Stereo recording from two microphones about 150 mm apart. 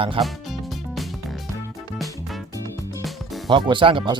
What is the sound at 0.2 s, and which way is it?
Speech, 35° right (ahead or behind).